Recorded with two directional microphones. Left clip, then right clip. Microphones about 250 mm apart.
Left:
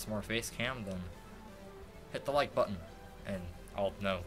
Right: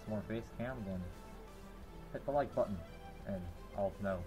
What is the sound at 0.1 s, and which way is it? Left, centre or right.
Speech, centre.